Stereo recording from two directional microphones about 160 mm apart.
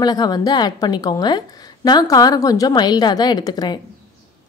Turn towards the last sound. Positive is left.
turn(degrees=25)  # may be behind; listen again after turning